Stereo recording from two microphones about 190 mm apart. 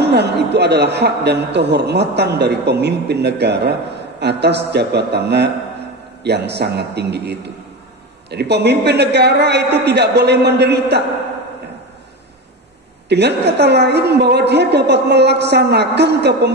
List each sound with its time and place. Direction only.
0.0 s a man's voice: 60° right (ahead or behind)
13.1 s a man's voice: 60° right (ahead or behind)